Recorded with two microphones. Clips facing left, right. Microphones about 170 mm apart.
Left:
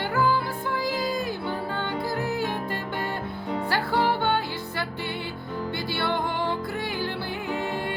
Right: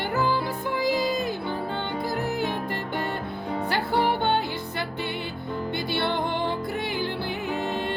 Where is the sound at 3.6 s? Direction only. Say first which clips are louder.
Even; 20° right (ahead or behind).